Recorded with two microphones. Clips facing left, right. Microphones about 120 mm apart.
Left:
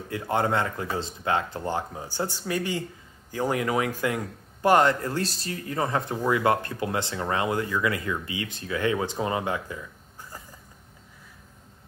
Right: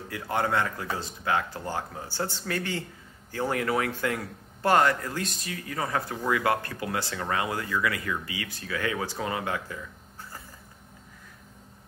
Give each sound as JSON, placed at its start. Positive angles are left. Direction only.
{"t": 0.1, "sound": "a man's voice", "side_deg": 25}